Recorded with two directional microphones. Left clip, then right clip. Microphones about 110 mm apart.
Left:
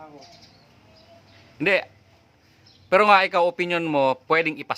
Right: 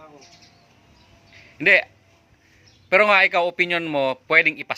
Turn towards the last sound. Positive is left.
turn(degrees=35)  # may be behind; listen again after turning